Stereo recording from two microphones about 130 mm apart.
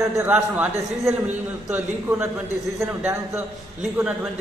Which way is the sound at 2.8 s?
20° right (ahead or behind).